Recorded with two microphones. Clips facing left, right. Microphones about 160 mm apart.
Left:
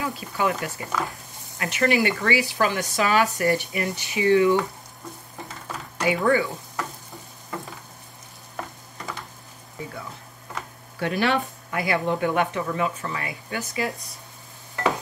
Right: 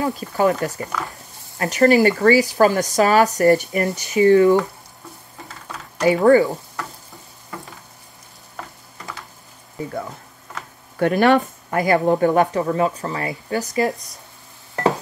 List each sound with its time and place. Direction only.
0.0 s speech: 40° right (ahead or behind)
6.0 s speech: 40° right (ahead or behind)
11.0 s speech: 50° right (ahead or behind)